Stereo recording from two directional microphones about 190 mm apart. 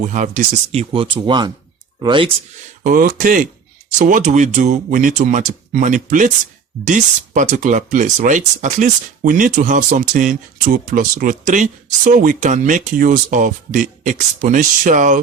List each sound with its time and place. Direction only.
0.0 s speech: 40° right (ahead or behind); by 2.3 s 25° right (ahead or behind)
2.8 s speech: 45° right (ahead or behind)